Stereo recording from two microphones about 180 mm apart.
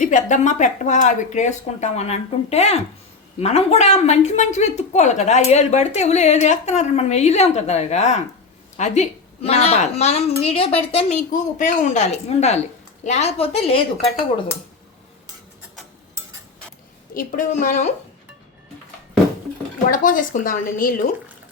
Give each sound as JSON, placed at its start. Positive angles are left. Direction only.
{"t": 0.0, "sound": "a woman's voice", "side_deg": 45}
{"t": 17.2, "sound": "a woman's voice", "side_deg": 45}
{"t": 19.9, "sound": "a woman's voice", "side_deg": 50}